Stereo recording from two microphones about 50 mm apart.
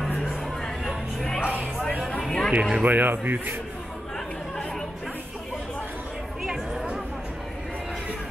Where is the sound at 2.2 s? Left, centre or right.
Centre.